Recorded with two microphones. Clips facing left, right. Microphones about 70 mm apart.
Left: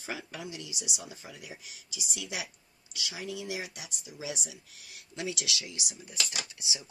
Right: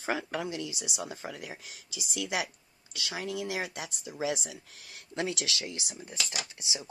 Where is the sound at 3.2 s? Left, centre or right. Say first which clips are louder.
Right 3 dB; right.